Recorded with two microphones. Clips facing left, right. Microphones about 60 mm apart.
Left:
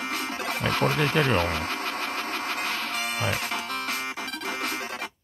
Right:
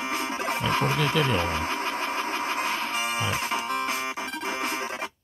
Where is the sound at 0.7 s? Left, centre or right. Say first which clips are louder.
Left 1 dB; right.